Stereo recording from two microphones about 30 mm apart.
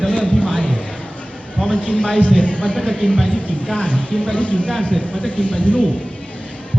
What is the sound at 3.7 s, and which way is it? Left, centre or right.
Speech, left.